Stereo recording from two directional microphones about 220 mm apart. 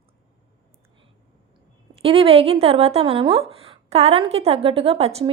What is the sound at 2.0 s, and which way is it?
Speech, 25° right (ahead or behind).